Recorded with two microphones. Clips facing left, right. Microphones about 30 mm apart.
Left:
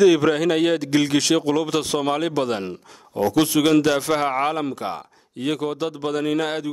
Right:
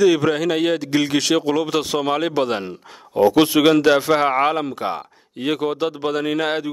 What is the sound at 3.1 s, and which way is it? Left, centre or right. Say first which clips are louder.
A man's voice: right 5 dB; right.